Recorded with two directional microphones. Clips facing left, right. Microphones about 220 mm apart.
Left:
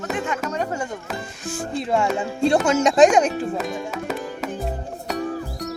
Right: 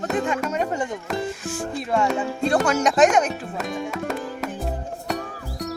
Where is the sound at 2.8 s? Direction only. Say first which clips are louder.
Left 4 dB; 30° left (ahead or behind).